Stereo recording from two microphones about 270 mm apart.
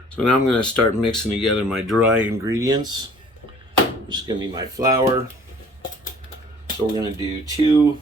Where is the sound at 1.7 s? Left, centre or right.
Centre.